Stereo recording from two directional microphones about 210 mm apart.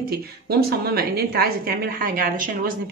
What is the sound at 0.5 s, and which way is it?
Speech, 50° right (ahead or behind).